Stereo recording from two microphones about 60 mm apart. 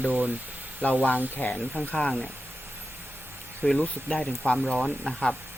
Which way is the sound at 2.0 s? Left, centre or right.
Centre.